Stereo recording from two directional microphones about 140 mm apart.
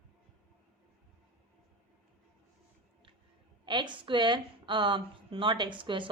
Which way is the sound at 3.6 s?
35° right (ahead or behind).